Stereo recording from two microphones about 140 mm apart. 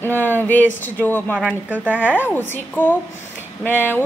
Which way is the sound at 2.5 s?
15° left (ahead or behind).